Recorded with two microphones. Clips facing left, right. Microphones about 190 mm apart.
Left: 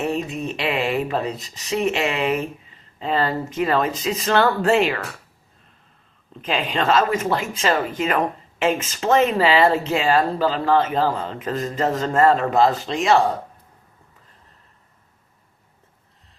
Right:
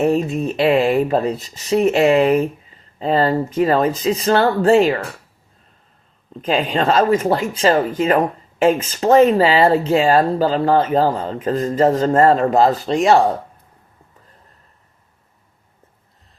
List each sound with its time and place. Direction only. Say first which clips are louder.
0.0 s speech: right 7 dB; 40° right (ahead or behind)
6.4 s speech: right 5 dB; 40° right (ahead or behind)